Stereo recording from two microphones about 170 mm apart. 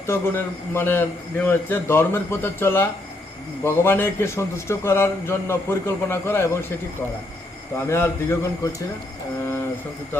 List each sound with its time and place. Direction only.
0.1 s a man's voice: 15° left (ahead or behind)
7.8 s a man's voice: 15° left (ahead or behind)